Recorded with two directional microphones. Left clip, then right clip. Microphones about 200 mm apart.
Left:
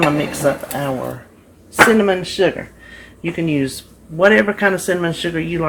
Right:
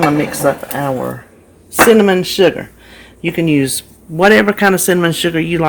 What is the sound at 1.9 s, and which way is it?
Speech, 55° right (ahead or behind).